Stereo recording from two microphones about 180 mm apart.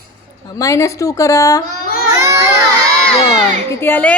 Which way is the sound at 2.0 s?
15° right (ahead or behind).